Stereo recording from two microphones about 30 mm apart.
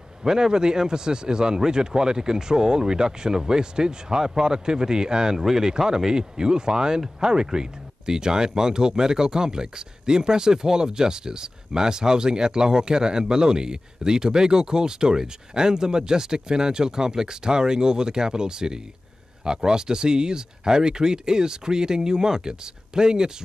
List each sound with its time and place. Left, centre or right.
0.2 s speech: centre